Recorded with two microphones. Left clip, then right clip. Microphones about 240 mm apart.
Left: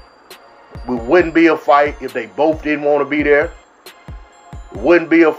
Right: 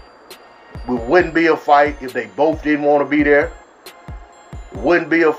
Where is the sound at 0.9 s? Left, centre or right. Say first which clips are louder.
Left 1 dB; centre.